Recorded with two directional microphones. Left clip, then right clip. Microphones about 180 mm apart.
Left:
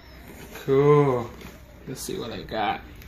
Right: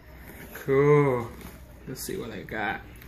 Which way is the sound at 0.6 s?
40° left (ahead or behind).